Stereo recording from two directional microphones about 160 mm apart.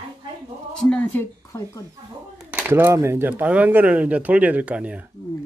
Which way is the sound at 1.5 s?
15° left (ahead or behind).